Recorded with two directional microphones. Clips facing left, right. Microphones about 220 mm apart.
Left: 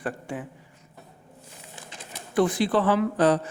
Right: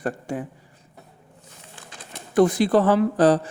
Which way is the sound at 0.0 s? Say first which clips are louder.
Right 4 dB; 40° right (ahead or behind).